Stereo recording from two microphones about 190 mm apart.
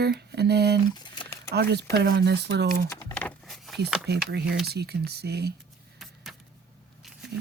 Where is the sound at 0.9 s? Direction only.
20° left (ahead or behind).